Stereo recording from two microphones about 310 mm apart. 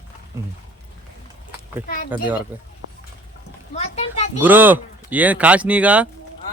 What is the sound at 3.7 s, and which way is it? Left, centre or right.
Speech, left.